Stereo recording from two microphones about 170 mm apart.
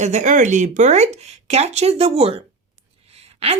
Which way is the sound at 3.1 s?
35° right (ahead or behind).